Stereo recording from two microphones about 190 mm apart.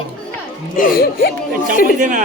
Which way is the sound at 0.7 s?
50° left (ahead or behind).